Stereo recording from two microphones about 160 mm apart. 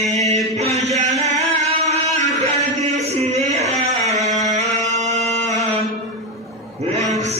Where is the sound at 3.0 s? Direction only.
40° right (ahead or behind).